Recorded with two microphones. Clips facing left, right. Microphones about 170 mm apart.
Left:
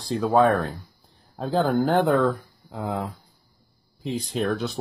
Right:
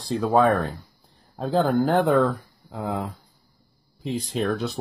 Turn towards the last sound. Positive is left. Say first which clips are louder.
# even
turn(degrees=0)  # may be behind; listen again after turning